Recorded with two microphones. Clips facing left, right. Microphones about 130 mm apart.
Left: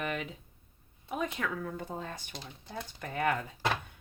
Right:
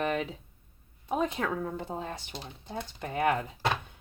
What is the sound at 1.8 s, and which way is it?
Speech, 20° right (ahead or behind).